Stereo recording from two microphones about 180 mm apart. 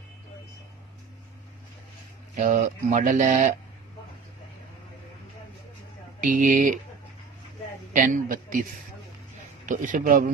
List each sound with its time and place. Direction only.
2.3 s speech: 45° right (ahead or behind)
6.1 s speech: 45° right (ahead or behind)
7.9 s speech: 45° right (ahead or behind)
9.6 s speech: 45° right (ahead or behind)